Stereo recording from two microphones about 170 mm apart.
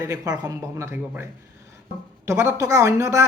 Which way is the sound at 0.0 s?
20° right (ahead or behind).